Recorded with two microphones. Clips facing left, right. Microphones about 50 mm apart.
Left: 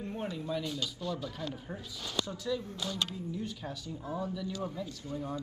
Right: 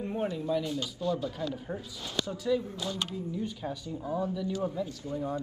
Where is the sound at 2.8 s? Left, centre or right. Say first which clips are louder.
Right 1 dB; right.